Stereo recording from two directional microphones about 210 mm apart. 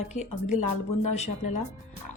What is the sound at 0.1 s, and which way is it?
Speech, 35° left (ahead or behind).